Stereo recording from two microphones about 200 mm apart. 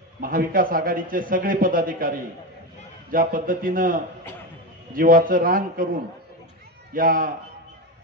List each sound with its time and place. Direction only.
0.2 s a man's voice: 45° right (ahead or behind)
6.9 s a man's voice: 45° right (ahead or behind)